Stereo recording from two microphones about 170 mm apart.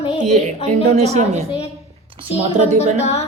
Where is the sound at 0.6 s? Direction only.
40° right (ahead or behind).